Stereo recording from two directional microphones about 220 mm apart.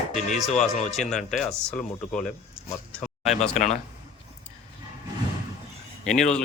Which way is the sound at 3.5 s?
35° left (ahead or behind).